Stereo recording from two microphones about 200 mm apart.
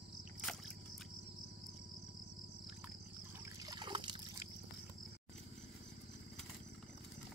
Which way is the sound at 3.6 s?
25° right (ahead or behind).